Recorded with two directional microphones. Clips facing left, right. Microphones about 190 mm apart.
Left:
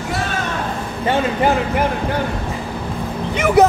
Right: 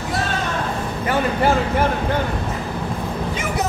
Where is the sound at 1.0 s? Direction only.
25° left (ahead or behind).